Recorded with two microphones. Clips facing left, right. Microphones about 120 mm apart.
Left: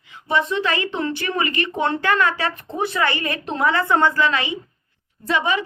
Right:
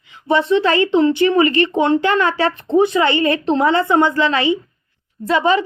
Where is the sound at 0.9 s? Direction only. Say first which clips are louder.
Right 11 dB; 20° right (ahead or behind).